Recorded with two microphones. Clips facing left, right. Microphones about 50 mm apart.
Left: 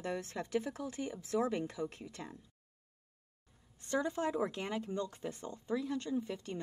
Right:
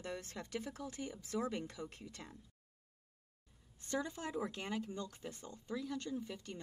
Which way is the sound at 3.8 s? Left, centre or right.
Left.